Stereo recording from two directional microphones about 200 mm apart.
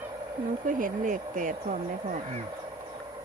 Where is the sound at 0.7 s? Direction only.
40° right (ahead or behind).